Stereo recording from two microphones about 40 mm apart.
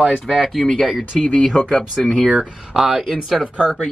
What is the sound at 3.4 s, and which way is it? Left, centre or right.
Speech, right.